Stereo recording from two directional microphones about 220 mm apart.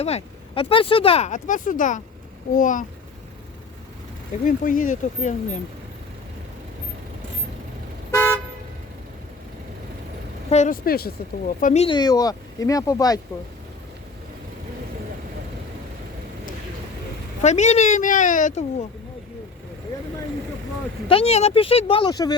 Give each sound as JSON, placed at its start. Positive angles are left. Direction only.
{"t": 0.0, "sound": "speech", "side_deg": 25}
{"t": 4.4, "sound": "speech", "side_deg": 35}
{"t": 8.1, "sound": "toot", "side_deg": 10}
{"t": 10.5, "sound": "speech", "side_deg": 35}
{"t": 17.4, "sound": "speech", "side_deg": 30}
{"t": 21.1, "sound": "speech", "side_deg": 25}